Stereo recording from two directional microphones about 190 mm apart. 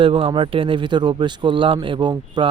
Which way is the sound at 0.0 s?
25° right (ahead or behind).